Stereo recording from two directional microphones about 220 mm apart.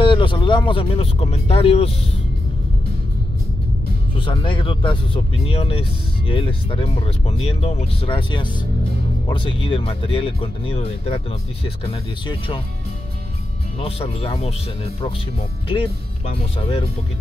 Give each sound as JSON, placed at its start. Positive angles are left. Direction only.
{"t": 0.0, "sound": "speech", "side_deg": 20}
{"t": 4.2, "sound": "speech", "side_deg": 20}
{"t": 13.7, "sound": "speech", "side_deg": 25}
{"t": 15.7, "sound": "speech", "side_deg": 25}